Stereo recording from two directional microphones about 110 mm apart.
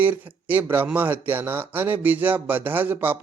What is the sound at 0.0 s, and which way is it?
Speech, 15° right (ahead or behind).